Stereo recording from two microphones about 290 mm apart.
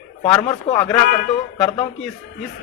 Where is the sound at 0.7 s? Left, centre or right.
Centre.